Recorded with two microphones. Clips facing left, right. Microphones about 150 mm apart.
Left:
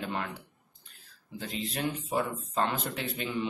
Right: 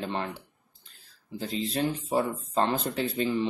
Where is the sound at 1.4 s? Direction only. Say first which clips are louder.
Right 5 dB; 35° right (ahead or behind).